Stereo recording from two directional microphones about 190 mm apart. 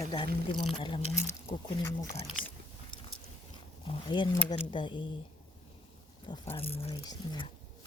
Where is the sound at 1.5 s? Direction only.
15° left (ahead or behind).